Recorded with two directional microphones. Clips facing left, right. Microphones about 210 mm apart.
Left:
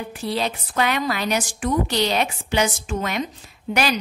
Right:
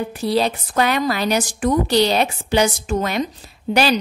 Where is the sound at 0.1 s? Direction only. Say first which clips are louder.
Right 4 dB; 35° right (ahead or behind).